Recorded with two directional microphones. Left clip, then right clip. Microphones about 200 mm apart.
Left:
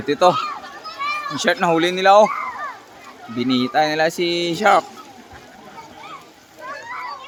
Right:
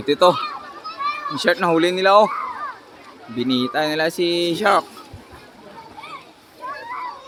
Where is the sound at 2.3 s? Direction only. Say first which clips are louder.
Left 1 dB; 40° left (ahead or behind).